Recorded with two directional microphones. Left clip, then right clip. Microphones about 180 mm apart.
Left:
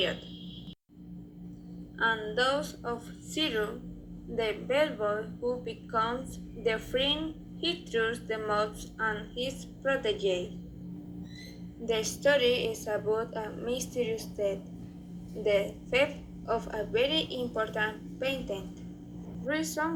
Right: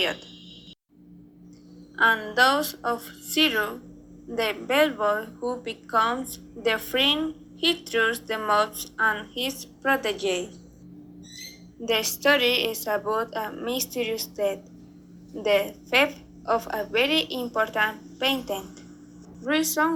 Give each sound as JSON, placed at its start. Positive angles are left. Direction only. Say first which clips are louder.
{"t": 2.0, "sound": "a woman's voice", "louder": "right 8 dB", "side_deg": -60}
{"t": 11.9, "sound": "a woman's voice", "louder": "right 5 dB", "side_deg": -60}